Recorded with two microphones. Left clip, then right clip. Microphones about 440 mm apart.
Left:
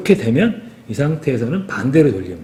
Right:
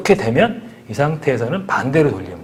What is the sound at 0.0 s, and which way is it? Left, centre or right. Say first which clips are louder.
Speech: right 2 dB; right.